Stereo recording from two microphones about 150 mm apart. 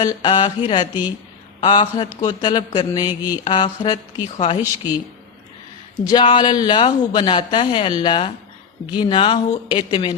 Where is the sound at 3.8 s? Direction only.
30° left (ahead or behind).